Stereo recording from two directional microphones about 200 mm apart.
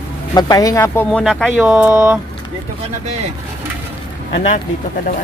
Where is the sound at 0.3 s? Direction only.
20° left (ahead or behind).